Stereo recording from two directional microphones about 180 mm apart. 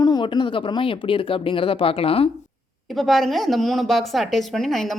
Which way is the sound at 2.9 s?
Centre (ahead or behind).